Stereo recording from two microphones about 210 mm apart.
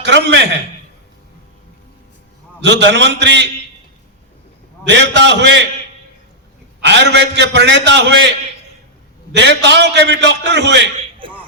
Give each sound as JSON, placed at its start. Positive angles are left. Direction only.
{"t": 0.0, "sound": "a man's voice", "side_deg": -55}
{"t": 2.6, "sound": "a man's voice", "side_deg": -55}
{"t": 4.9, "sound": "a man's voice", "side_deg": -55}
{"t": 6.8, "sound": "a man's voice", "side_deg": -55}
{"t": 9.3, "sound": "a man's voice", "side_deg": -55}